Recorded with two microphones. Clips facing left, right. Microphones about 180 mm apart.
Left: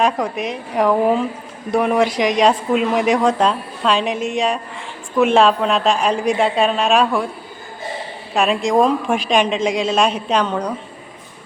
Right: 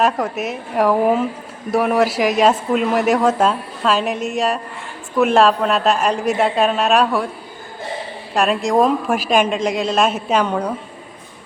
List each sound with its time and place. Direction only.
0.0 s speech: 5° right (ahead or behind)
8.3 s speech: centre (ahead or behind)